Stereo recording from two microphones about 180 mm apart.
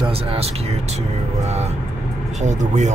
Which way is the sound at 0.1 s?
30° right (ahead or behind).